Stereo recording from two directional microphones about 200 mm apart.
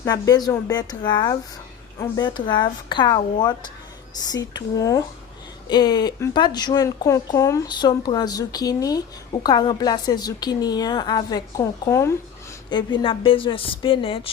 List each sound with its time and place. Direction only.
0.0 s a woman's voice: 20° left (ahead or behind)
4.5 s a woman's voice: 15° left (ahead or behind)